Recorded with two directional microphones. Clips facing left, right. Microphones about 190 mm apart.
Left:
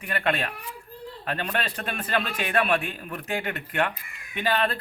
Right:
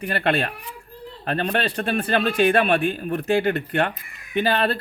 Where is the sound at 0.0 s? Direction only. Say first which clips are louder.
Right 5 dB; 35° right (ahead or behind).